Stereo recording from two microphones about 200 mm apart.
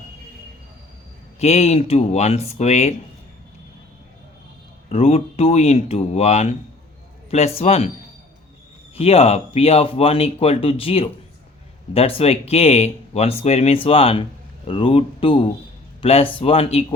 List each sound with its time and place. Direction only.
1.4 s speech: 35° left (ahead or behind)
4.9 s speech: 30° left (ahead or behind)
9.0 s speech: 30° left (ahead or behind)